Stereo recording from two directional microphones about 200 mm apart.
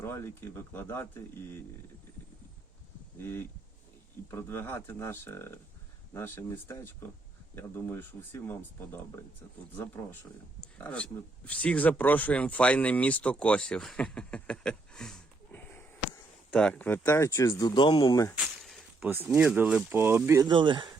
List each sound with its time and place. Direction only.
0.0 s speech: 10° left (ahead or behind)
3.2 s speech: 10° left (ahead or behind)
18.3 s speech: centre (ahead or behind)
20.5 s speech: 25° right (ahead or behind)